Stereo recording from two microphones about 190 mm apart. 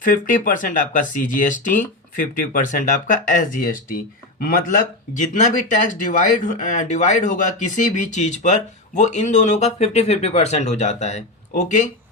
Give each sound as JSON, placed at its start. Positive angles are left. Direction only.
{"t": 0.0, "sound": "speech", "side_deg": 45}